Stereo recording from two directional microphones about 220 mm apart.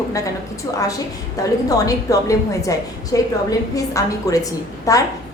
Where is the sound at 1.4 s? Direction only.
15° left (ahead or behind).